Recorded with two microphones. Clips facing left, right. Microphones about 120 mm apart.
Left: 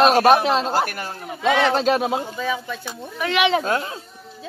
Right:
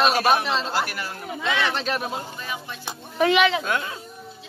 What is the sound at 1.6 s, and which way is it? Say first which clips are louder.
Speech: left 8 dB; 90° left.